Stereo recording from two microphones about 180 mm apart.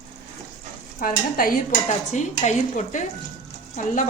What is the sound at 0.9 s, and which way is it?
Stir, 50° left (ahead or behind).